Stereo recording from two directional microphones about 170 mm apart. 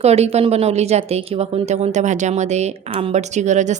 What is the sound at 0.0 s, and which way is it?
A woman's voice, 40° right (ahead or behind).